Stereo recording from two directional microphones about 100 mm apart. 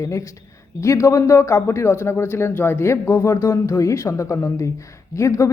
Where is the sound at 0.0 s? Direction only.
30° left (ahead or behind).